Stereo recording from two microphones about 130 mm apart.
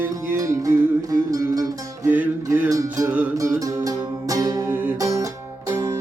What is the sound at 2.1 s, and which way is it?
Music, 15° right (ahead or behind).